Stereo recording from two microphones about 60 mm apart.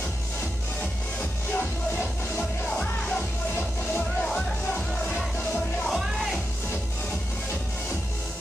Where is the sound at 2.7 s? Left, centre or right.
Centre.